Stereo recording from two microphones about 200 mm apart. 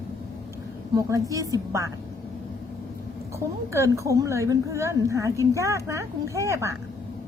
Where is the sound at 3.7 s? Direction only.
15° right (ahead or behind).